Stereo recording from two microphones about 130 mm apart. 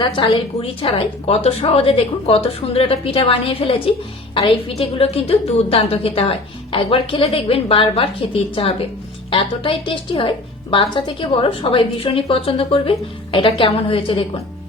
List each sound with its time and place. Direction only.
0.0 s a woman's voice: 40° left (ahead or behind)